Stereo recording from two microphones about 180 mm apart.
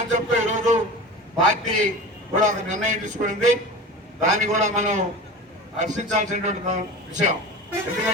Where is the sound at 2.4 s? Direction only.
40° right (ahead or behind).